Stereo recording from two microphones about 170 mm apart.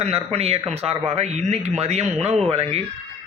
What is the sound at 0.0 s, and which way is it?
Speech, 35° right (ahead or behind).